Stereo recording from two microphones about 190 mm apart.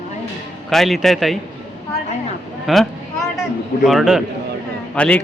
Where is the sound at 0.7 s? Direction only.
Centre (ahead or behind).